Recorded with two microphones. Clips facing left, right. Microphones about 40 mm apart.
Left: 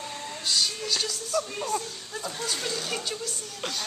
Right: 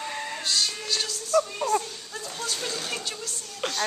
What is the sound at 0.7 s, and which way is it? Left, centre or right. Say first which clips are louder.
Speech: even; centre.